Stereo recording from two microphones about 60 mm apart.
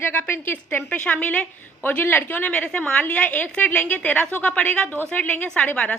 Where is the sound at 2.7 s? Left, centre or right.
Centre.